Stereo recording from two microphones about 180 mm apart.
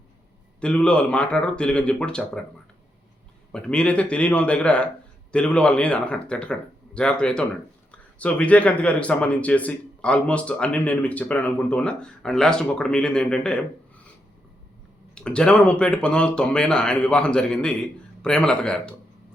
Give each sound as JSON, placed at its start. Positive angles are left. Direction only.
{"t": 0.6, "sound": "speech", "side_deg": 5}
{"t": 3.5, "sound": "speech", "side_deg": 5}
{"t": 15.1, "sound": "speech", "side_deg": 5}